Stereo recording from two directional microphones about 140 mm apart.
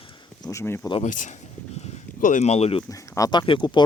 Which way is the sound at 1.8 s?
60° left (ahead or behind).